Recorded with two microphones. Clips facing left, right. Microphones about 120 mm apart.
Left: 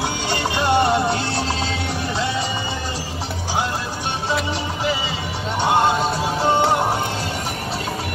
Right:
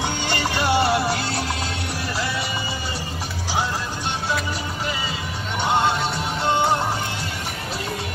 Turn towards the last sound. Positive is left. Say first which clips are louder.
# left 3 dB
turn(degrees=10)  # may be behind; listen again after turning